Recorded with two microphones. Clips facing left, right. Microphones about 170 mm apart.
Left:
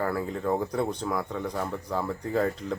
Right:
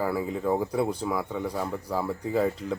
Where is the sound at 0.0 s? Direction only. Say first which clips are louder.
Right 1 dB; 5° right (ahead or behind).